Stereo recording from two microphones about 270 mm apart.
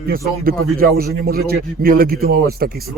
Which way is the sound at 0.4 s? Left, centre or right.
Right.